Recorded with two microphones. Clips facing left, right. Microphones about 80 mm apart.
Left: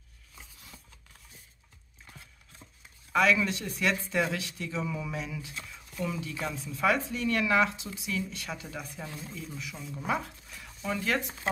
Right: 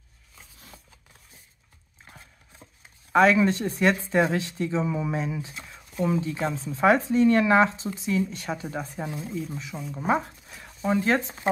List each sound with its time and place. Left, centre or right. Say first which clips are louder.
3.1 s speech: right 6 dB; right